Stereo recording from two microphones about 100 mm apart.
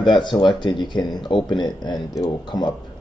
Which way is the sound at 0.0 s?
50° left (ahead or behind).